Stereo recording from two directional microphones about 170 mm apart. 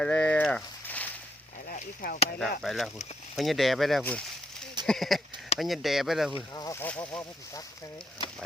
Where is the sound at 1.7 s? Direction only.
55° left (ahead or behind).